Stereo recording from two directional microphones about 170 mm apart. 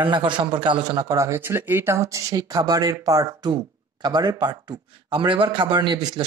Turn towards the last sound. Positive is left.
turn(degrees=-25)  # may be behind; listen again after turning